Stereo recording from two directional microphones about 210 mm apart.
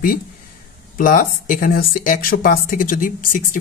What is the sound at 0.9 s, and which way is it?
Speech, 40° left (ahead or behind).